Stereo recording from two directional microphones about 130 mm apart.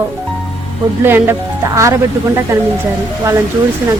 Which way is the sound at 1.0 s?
15° right (ahead or behind).